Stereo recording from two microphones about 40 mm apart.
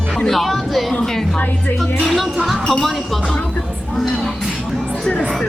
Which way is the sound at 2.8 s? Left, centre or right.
Centre.